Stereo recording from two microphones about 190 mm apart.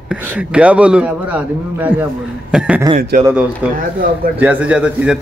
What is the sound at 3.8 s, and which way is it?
Speech, 50° right (ahead or behind).